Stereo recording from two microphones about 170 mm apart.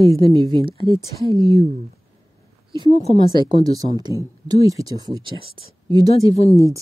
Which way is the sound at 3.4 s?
25° right (ahead or behind).